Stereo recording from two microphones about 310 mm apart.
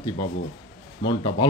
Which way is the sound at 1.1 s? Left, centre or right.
Centre.